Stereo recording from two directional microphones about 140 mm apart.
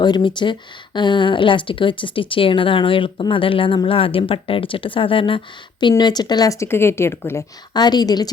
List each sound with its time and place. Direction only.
0.0 s speech: 30° left (ahead or behind)
7.7 s speech: 30° left (ahead or behind)